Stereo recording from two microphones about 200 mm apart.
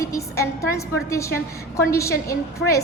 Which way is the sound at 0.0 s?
15° left (ahead or behind).